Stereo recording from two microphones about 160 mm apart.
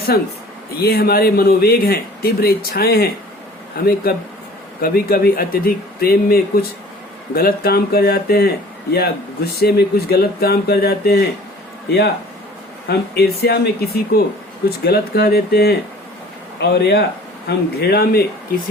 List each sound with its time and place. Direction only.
0.1 s a man's voice: 80° left
11.9 s a man's voice: 90° left
16.6 s speech: 90° left